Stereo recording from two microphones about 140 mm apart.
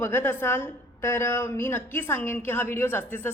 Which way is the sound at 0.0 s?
15° left (ahead or behind).